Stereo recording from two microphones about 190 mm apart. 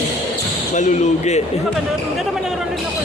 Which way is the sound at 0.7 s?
40° left (ahead or behind).